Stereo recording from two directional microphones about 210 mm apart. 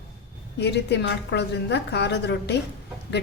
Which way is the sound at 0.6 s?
55° left (ahead or behind).